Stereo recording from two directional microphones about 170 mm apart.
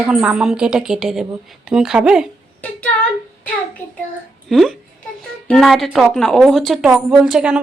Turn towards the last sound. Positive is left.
turn(degrees=-5)  # may be behind; listen again after turning